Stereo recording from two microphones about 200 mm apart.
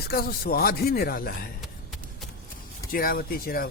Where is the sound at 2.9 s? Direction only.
45° left (ahead or behind).